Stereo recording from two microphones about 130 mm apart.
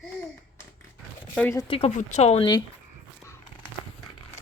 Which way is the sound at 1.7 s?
50° left (ahead or behind).